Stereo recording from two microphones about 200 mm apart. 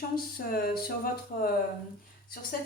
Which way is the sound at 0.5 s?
50° left (ahead or behind).